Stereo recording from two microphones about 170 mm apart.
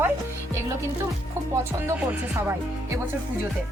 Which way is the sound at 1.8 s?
15° right (ahead or behind).